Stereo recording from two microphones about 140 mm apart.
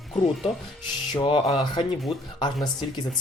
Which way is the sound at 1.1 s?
40° left (ahead or behind).